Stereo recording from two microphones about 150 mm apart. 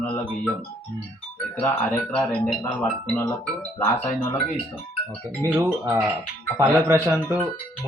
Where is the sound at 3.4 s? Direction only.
10° left (ahead or behind).